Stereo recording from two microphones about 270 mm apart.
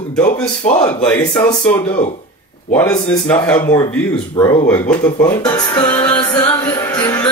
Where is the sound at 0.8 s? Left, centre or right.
Centre.